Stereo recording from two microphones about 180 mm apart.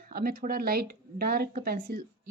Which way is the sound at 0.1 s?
55° right (ahead or behind).